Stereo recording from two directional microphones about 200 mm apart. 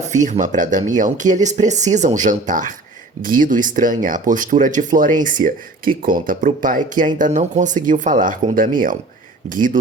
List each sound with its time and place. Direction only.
0.3 s speech: 40° right (ahead or behind)